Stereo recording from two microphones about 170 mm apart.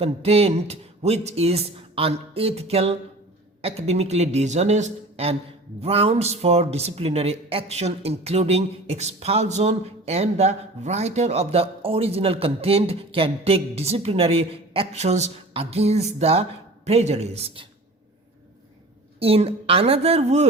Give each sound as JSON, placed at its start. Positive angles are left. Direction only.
{"t": 0.0, "sound": "speech", "side_deg": -35}
{"t": 19.2, "sound": "speech", "side_deg": -35}